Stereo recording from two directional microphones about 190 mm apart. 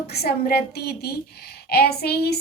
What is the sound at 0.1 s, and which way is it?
A woman's voice, 55° left (ahead or behind).